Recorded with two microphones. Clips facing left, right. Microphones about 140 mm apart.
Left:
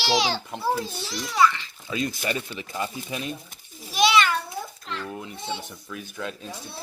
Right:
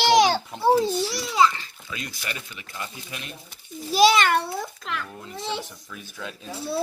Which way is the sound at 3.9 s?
35° right (ahead or behind).